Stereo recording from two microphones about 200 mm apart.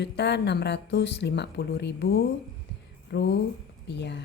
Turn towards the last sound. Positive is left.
turn(degrees=60)  # may be behind; listen again after turning